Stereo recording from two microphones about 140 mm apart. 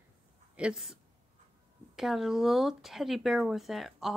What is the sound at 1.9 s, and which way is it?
A woman's voice, 5° right (ahead or behind).